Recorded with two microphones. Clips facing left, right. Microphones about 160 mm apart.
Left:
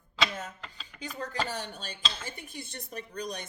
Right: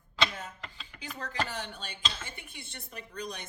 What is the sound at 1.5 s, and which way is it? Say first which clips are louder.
Speech: left 2 dB; 40° left (ahead or behind).